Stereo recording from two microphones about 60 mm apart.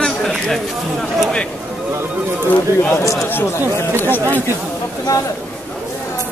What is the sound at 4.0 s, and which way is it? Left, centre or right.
Speech, left.